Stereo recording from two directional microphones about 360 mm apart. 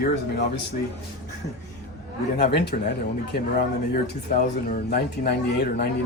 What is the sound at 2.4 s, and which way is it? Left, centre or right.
Speech, left.